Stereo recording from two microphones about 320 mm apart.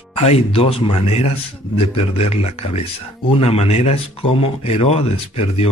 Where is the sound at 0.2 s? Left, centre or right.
Centre.